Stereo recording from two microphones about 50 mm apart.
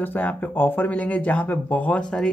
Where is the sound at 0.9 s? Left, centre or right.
Left.